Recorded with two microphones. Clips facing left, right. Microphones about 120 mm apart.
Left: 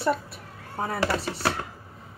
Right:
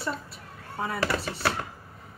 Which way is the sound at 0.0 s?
65° left (ahead or behind).